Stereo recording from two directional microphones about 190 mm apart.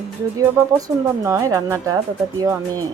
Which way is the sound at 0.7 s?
15° right (ahead or behind).